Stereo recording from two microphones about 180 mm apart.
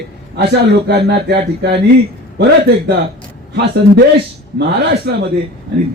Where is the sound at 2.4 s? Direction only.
65° right (ahead or behind).